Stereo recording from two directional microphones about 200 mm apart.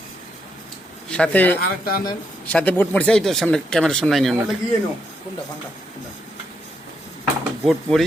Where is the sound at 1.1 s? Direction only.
5° left (ahead or behind).